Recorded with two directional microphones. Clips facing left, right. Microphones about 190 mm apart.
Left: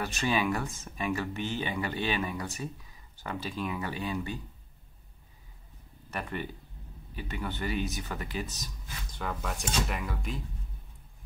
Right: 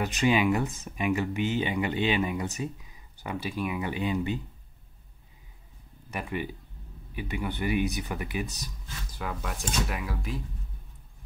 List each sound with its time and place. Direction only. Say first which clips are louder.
0.0 s speech: right 5 dB; 15° right (ahead or behind)
6.0 s speech: right 3 dB; 10° right (ahead or behind)